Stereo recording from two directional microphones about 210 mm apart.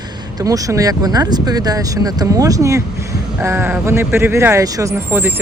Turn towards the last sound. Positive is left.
turn(degrees=-10)  # may be behind; listen again after turning